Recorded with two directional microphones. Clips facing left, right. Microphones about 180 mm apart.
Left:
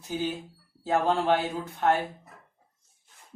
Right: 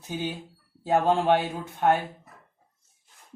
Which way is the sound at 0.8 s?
15° right (ahead or behind).